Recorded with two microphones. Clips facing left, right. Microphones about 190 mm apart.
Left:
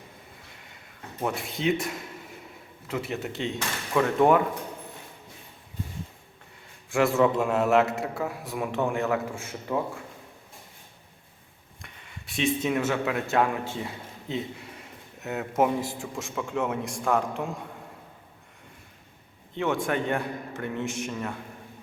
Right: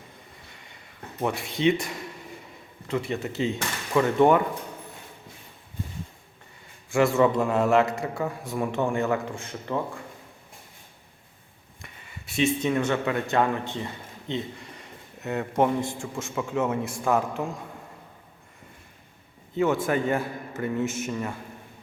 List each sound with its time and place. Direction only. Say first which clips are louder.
1.2 s a man's voice: right 4 dB; centre (ahead or behind)
6.9 s a man's voice: right 1 dB; centre (ahead or behind)
11.8 s speech: right 1 dB; centre (ahead or behind)
19.5 s a man's voice: right 3 dB; 5° right (ahead or behind)